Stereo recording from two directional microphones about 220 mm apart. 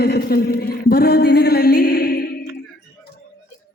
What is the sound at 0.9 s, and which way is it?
Music, 45° left (ahead or behind).